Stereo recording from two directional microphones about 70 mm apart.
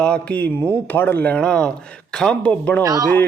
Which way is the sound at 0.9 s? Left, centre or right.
Left.